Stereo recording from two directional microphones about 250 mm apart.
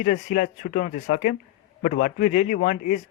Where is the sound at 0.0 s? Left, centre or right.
Left.